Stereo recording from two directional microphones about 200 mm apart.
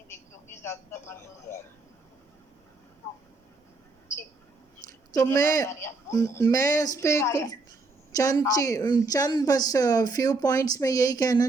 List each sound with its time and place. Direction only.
0.1 s speech: 10° left (ahead or behind)
5.1 s speech: 15° left (ahead or behind)